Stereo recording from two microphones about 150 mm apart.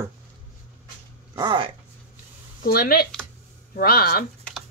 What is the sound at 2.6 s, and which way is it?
A woman's voice, 75° left (ahead or behind).